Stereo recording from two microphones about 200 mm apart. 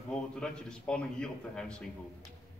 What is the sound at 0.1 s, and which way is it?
A man's voice, 5° left (ahead or behind).